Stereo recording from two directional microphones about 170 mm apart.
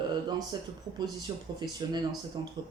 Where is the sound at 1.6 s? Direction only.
25° right (ahead or behind).